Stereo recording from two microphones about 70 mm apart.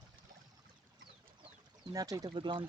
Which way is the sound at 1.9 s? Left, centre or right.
Right.